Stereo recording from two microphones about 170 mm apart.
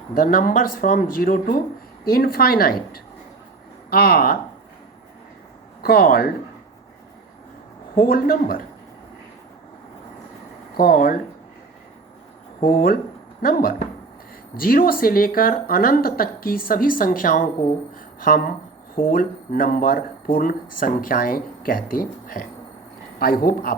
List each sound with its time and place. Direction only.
0.1 s speech: 60° left (ahead or behind)
5.8 s speech: 60° left (ahead or behind)
7.9 s speech: 60° left (ahead or behind)
10.8 s speech: 60° left (ahead or behind)
12.6 s speech: 60° left (ahead or behind)
17.9 s a sound: 60° left (ahead or behind)
18.9 s speech: 60° left (ahead or behind)